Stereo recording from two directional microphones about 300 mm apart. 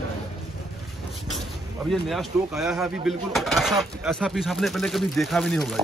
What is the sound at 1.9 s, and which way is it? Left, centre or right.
A man's voice, centre.